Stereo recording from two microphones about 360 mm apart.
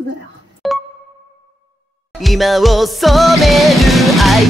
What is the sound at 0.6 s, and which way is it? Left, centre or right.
Music, centre.